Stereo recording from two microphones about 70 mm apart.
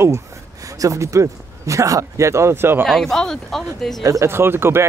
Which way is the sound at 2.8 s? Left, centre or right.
Centre.